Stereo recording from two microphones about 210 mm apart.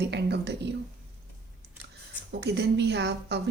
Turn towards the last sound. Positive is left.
turn(degrees=-55)  # may be behind; listen again after turning